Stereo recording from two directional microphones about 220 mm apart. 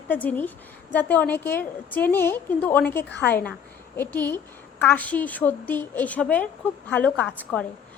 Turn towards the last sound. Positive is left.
turn(degrees=5)  # may be behind; listen again after turning